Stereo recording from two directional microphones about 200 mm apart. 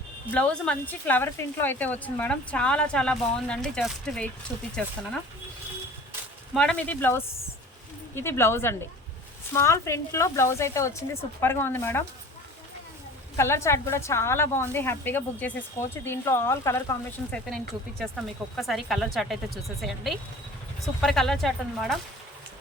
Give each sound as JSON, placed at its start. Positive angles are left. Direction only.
{"t": 0.3, "sound": "speech", "side_deg": 5}
{"t": 6.5, "sound": "a woman's voice", "side_deg": 5}
{"t": 13.3, "sound": "a woman's voice", "side_deg": 15}